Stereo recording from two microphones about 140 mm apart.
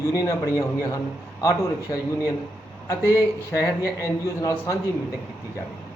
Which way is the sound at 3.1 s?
20° left (ahead or behind).